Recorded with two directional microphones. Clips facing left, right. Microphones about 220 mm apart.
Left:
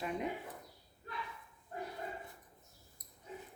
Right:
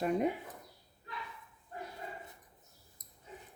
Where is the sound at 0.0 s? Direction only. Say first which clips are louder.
Right 8 dB; 45° right (ahead or behind).